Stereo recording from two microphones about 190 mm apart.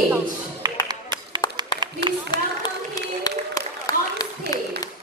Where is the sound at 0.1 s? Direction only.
20° right (ahead or behind).